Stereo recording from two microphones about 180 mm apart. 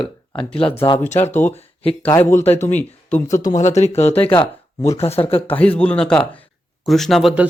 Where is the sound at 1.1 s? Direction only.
40° left (ahead or behind).